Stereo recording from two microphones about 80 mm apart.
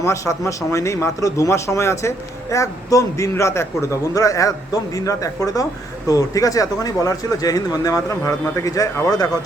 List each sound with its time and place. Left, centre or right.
0.0 s a man's voice: left